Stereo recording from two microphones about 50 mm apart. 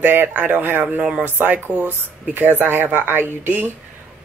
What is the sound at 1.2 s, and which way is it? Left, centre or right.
Speech, right.